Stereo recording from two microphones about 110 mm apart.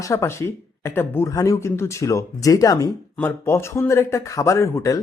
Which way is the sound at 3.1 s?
20° left (ahead or behind).